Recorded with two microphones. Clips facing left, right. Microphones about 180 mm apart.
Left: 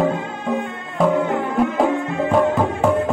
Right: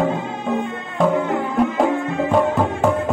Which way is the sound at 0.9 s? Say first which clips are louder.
Left 1 dB; centre (ahead or behind).